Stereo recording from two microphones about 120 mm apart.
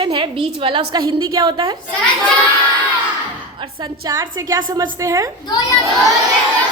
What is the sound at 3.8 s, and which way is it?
A woman's voice, 30° right (ahead or behind).